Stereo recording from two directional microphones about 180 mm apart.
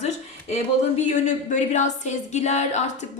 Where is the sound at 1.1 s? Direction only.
40° left (ahead or behind).